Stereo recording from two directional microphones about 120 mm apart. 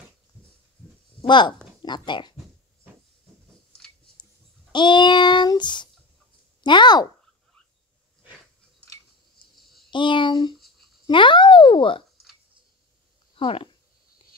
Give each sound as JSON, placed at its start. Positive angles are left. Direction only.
{"t": 1.2, "sound": "speech", "side_deg": 40}
{"t": 4.7, "sound": "child singing", "side_deg": 40}
{"t": 9.6, "sound": "a sound", "side_deg": 0}
{"t": 9.8, "sound": "a child's voice", "side_deg": 40}
{"t": 13.3, "sound": "speech", "side_deg": 50}